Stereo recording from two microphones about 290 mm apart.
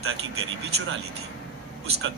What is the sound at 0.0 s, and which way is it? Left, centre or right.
Speech, right.